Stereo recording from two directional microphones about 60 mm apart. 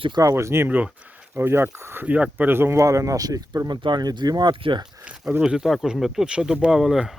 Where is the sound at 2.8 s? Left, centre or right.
Right.